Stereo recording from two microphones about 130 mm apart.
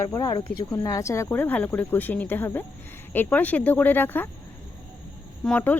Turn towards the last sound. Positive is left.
turn(degrees=10)  # may be behind; listen again after turning